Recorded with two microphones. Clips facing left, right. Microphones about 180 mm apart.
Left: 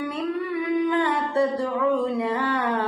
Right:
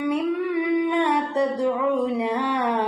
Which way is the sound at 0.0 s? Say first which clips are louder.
Right 4 dB; 15° right (ahead or behind).